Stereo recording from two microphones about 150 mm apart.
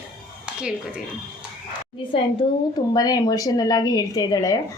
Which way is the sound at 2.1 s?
35° left (ahead or behind).